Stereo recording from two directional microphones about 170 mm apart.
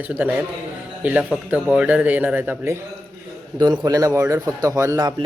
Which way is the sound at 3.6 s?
25° right (ahead or behind).